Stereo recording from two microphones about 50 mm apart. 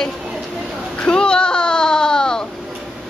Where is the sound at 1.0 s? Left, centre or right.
Centre.